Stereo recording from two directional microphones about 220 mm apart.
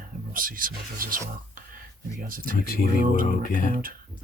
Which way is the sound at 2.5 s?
40° left (ahead or behind).